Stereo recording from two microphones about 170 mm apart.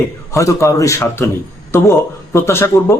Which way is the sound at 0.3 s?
20° left (ahead or behind).